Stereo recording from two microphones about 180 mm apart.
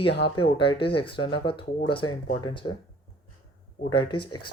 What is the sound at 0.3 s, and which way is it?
Speech, 30° left (ahead or behind).